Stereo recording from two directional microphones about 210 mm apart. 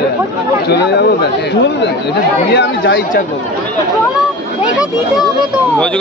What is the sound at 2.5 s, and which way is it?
Speech, 55° left (ahead or behind).